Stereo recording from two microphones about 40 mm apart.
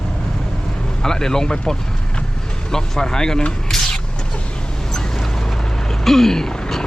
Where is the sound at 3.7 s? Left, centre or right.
Centre.